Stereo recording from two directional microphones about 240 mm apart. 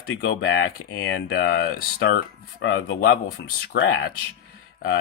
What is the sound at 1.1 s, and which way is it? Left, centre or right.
Speech, left.